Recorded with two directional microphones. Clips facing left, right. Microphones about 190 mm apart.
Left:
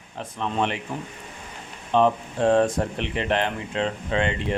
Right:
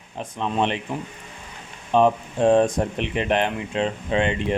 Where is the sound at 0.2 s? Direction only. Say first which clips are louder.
Right 2 dB; 20° right (ahead or behind).